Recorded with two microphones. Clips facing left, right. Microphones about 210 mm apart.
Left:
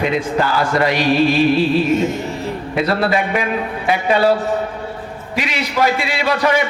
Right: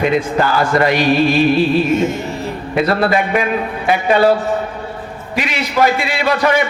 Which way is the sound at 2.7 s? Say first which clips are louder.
Right 3 dB; 50° right (ahead or behind).